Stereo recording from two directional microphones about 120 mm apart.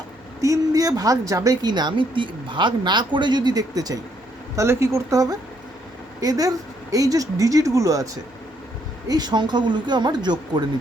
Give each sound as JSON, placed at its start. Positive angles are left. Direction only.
{"t": 0.4, "sound": "speech", "side_deg": -30}
{"t": 9.0, "sound": "speech", "side_deg": -35}